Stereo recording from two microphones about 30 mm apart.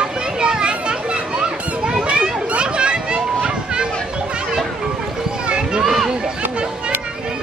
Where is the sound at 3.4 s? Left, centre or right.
Right.